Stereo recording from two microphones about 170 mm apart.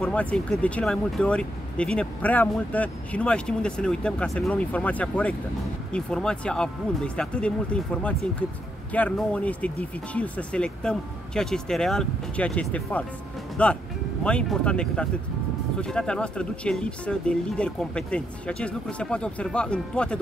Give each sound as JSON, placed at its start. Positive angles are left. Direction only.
{"t": 0.0, "sound": "speech", "side_deg": 5}